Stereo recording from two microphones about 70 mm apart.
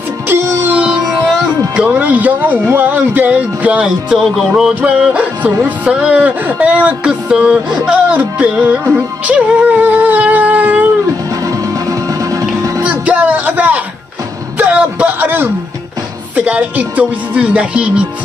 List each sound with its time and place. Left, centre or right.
0.3 s music: right
1.9 s speech: right
3.8 s music: centre
4.5 s speech: centre
5.0 s music: centre
5.6 s speech: centre
8.9 s music: centre
11.4 s music: right
12.8 s music: right
14.6 s a man's voice: right